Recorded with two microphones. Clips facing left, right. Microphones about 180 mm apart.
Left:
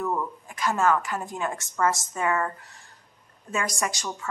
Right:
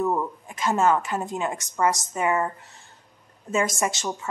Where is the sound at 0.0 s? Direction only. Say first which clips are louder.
Right 4 dB; 20° right (ahead or behind).